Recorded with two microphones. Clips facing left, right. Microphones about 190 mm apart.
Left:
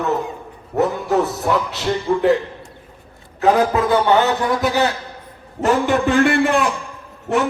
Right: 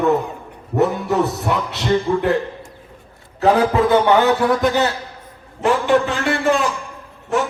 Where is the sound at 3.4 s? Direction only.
30° right (ahead or behind).